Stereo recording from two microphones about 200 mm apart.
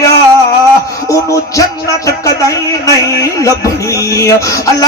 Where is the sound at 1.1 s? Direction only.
15° left (ahead or behind).